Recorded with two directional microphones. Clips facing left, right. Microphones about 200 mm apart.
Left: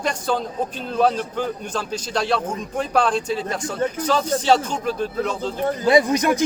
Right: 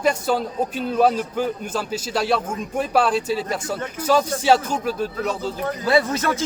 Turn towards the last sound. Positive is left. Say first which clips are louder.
# left 3 dB
turn(degrees=15)  # may be behind; listen again after turning